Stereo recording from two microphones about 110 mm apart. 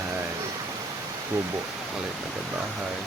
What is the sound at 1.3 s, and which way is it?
Speech, 20° right (ahead or behind).